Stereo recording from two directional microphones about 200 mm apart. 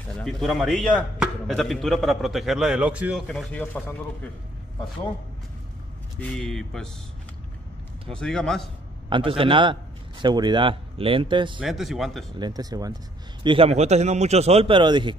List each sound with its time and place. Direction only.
0.1 s speech: 5° left (ahead or behind)
6.1 s speech: 5° left (ahead or behind)
8.1 s speech: 5° left (ahead or behind)
9.1 s speech: 25° right (ahead or behind)
11.6 s speech: centre (ahead or behind)
12.4 s a man's voice: 20° right (ahead or behind)